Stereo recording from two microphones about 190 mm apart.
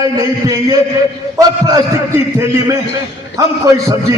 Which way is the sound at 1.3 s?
20° right (ahead or behind).